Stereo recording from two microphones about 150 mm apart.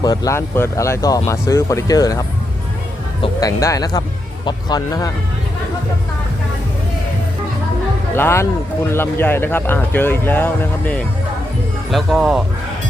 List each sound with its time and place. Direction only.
0.0 s speech: 25° left (ahead or behind)
3.4 s speech: 20° left (ahead or behind)
8.1 s speech: 15° left (ahead or behind)
11.9 s speech: centre (ahead or behind)